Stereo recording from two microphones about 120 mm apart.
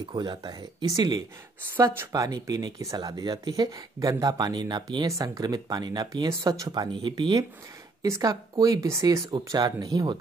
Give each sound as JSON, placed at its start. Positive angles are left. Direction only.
{"t": 0.1, "sound": "speech", "side_deg": -35}
{"t": 1.7, "sound": "speech", "side_deg": -20}
{"t": 8.0, "sound": "speech", "side_deg": -30}